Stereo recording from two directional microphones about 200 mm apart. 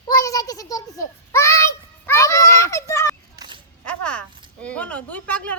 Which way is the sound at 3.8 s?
5° left (ahead or behind).